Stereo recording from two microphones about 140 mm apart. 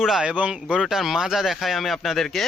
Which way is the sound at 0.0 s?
5° right (ahead or behind).